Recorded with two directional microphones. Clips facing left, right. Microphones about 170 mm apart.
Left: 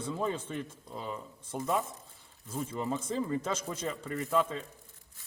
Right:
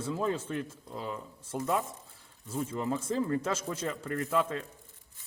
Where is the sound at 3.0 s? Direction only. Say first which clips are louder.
Right 2 dB; 10° left (ahead or behind).